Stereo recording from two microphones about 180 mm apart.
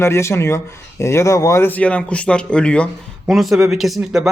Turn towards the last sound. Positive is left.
turn(degrees=0)  # may be behind; listen again after turning